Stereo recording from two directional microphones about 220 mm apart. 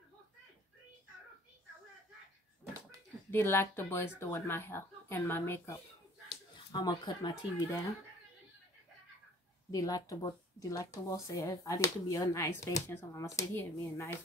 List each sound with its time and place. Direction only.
3.3 s speech: 10° left (ahead or behind)
9.7 s speech: 15° left (ahead or behind)